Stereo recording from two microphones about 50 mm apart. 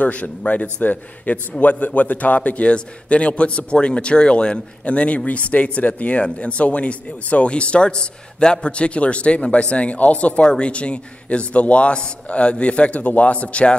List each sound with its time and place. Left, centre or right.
0.0 s a man's voice: left